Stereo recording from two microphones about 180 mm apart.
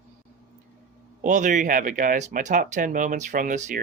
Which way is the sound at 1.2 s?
45° right (ahead or behind).